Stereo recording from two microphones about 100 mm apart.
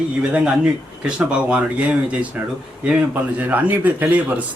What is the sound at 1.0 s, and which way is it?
A man's voice, 10° right (ahead or behind).